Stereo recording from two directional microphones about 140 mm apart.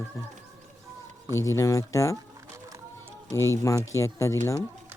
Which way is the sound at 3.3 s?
20° left (ahead or behind).